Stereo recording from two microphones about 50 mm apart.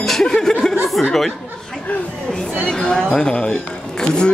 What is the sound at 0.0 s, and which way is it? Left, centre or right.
Chuckle, centre.